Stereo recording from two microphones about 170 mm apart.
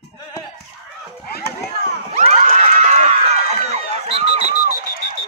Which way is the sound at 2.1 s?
35° right (ahead or behind).